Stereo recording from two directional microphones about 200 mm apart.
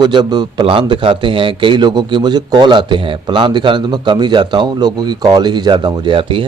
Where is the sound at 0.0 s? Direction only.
20° right (ahead or behind).